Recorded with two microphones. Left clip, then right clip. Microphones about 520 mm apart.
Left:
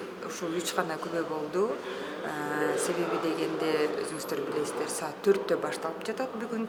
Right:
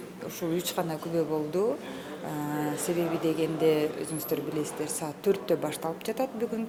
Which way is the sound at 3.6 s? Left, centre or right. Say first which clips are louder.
Right 4 dB; right.